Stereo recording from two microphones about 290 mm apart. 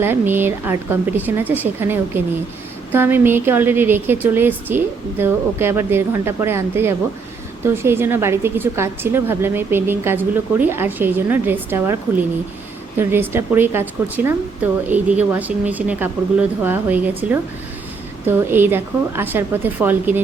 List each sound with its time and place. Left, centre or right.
0.0 s a woman's voice: centre